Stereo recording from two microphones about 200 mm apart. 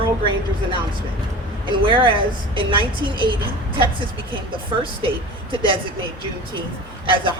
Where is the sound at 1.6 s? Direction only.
25° right (ahead or behind).